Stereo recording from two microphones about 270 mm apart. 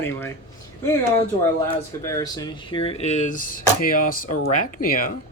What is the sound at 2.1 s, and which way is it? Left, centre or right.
Speech, centre.